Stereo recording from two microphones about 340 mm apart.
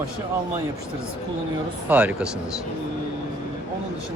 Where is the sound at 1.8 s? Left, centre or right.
Centre.